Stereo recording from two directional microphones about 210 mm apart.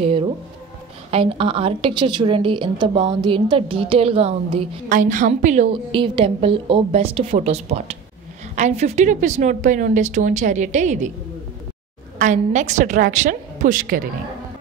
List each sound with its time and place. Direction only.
0.0 s music: 25° right (ahead or behind)
1.1 s a woman's voice: 25° right (ahead or behind)
4.8 s a woman's voice: 40° right (ahead or behind)
12.2 s a woman's voice: 35° right (ahead or behind)